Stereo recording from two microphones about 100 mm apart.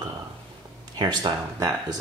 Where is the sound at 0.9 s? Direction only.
45° right (ahead or behind).